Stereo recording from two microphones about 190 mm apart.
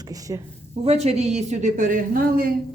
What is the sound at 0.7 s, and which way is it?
A woman's voice, 35° right (ahead or behind).